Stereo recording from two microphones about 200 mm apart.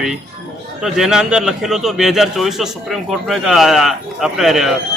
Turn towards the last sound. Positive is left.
turn(degrees=0)  # may be behind; listen again after turning